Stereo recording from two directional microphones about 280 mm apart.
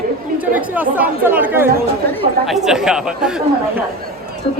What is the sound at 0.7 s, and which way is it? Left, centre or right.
Speech, centre.